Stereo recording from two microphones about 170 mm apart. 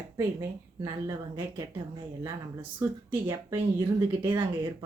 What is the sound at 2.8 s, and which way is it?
Speech, 15° right (ahead or behind).